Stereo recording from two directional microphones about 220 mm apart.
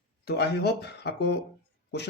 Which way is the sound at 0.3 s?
50° left (ahead or behind).